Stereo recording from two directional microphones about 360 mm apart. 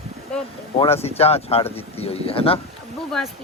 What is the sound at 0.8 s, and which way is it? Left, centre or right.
Speech, centre.